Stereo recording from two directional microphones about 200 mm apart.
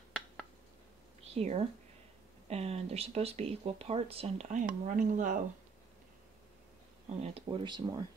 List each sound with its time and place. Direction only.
1.2 s a woman's voice: 30° right (ahead or behind)
7.2 s speech: 30° right (ahead or behind)